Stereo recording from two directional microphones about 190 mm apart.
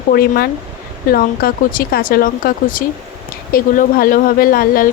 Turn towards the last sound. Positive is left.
turn(degrees=50)  # may be behind; listen again after turning